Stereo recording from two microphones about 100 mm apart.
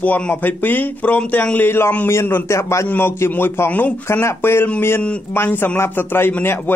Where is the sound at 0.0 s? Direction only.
15° left (ahead or behind).